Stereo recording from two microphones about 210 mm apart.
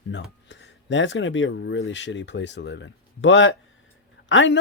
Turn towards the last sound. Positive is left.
turn(degrees=65)  # may be behind; listen again after turning